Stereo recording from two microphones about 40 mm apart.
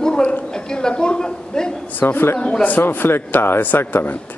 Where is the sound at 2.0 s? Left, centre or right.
Left.